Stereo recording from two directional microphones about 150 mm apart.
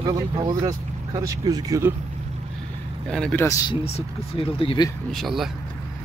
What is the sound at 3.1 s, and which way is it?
Speech, 5° left (ahead or behind).